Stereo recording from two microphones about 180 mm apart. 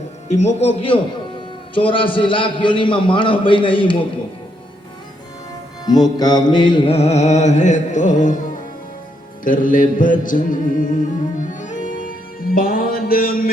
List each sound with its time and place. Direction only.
0.3 s music: 40° left (ahead or behind)
1.7 s a man's voice: 30° left (ahead or behind)
5.8 s music: 20° left (ahead or behind); by 13.5 s 55° left (ahead or behind)